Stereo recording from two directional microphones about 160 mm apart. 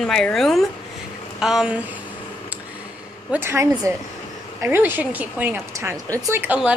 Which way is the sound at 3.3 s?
15° right (ahead or behind).